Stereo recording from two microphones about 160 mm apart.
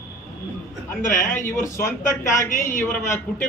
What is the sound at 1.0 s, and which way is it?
Speech, 50° left (ahead or behind).